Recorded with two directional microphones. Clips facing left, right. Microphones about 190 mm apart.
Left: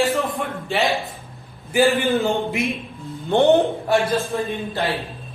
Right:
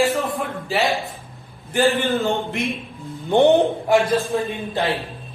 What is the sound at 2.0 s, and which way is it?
Speech, 15° left (ahead or behind).